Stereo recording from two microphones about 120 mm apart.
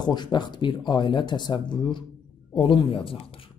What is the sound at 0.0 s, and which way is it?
Speech, 40° left (ahead or behind).